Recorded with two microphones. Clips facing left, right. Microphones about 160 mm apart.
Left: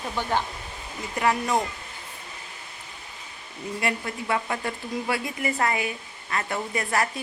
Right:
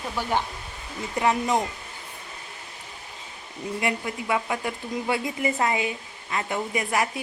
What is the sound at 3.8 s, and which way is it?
Speech, 15° right (ahead or behind).